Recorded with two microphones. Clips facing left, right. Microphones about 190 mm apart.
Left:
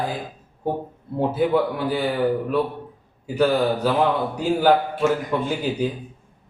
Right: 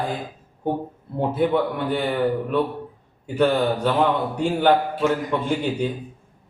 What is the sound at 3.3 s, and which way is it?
Speech, 5° left (ahead or behind).